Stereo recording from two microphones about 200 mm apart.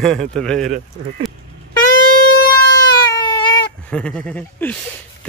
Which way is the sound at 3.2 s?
20° left (ahead or behind).